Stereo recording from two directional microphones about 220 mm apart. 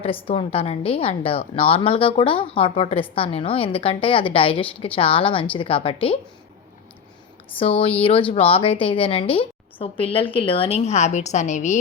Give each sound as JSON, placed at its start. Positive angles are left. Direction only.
{"t": 0.3, "sound": "a woman's voice", "side_deg": 25}
{"t": 7.6, "sound": "a woman's voice", "side_deg": 25}